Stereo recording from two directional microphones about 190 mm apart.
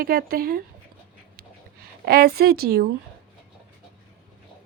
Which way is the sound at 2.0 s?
55° right (ahead or behind).